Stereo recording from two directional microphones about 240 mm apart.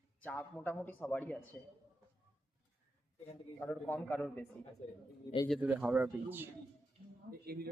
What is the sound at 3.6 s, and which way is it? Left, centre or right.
Speech, centre.